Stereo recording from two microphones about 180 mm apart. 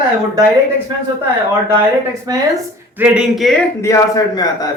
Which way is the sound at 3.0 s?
5° right (ahead or behind).